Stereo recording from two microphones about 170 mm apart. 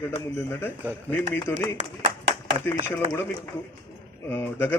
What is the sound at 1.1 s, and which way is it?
Speech, 10° left (ahead or behind).